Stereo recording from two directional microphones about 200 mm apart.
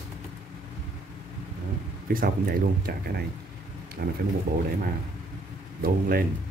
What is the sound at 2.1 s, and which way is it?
Speech, 45° right (ahead or behind).